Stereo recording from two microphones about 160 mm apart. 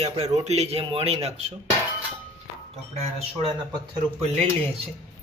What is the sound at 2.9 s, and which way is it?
Speech, 40° right (ahead or behind).